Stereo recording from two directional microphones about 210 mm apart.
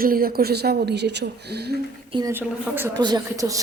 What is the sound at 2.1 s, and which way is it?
A woman's voice, 15° right (ahead or behind).